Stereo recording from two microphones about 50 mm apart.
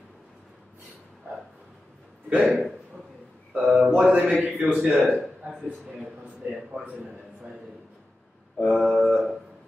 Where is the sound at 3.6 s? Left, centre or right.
Right.